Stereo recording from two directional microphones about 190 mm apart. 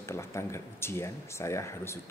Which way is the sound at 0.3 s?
15° left (ahead or behind).